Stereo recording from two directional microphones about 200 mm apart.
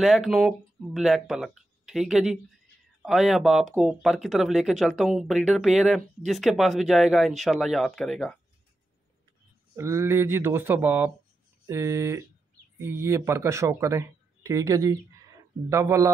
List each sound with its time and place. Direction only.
0.0 s speech: centre (ahead or behind)
9.8 s speech: 15° right (ahead or behind)